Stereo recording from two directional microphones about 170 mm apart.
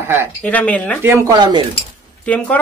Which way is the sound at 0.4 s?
10° left (ahead or behind).